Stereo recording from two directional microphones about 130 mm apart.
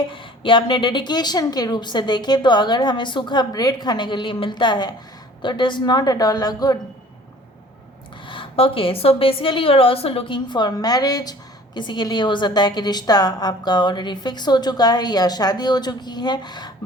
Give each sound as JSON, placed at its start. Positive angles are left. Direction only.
{"t": 0.1, "sound": "a woman's voice", "side_deg": 40}
{"t": 8.3, "sound": "a woman's voice", "side_deg": 45}